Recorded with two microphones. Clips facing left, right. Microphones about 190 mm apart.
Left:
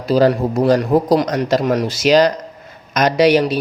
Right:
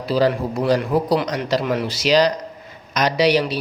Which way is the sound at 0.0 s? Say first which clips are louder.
Left 5 dB; 45° left (ahead or behind).